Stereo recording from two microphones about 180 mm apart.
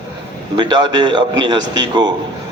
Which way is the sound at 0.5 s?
25° right (ahead or behind).